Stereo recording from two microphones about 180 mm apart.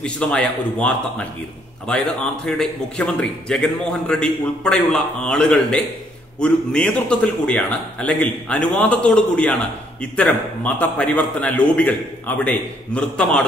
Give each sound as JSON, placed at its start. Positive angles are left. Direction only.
{"t": 0.0, "sound": "a man's voice", "side_deg": 5}